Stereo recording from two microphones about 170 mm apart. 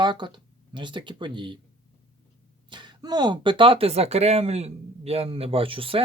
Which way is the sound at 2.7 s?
25° right (ahead or behind).